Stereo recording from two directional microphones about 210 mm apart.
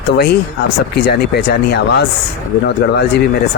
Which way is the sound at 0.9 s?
50° left (ahead or behind).